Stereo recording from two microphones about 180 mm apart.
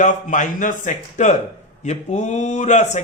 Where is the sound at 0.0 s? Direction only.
45° left (ahead or behind).